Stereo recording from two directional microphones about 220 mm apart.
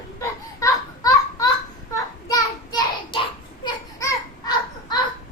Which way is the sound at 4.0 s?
20° left (ahead or behind).